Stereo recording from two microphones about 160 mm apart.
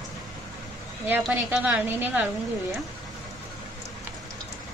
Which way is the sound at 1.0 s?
10° right (ahead or behind).